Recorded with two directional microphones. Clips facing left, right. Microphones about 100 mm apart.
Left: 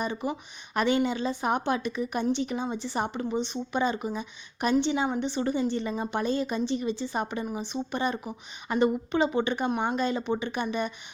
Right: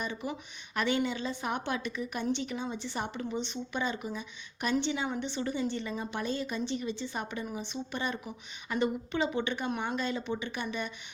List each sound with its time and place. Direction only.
0.0 s a woman's voice: 35° left (ahead or behind)